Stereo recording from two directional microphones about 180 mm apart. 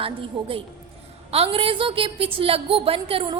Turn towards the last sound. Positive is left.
turn(degrees=-30)  # may be behind; listen again after turning